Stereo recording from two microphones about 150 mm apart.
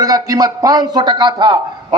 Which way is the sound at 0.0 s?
25° right (ahead or behind).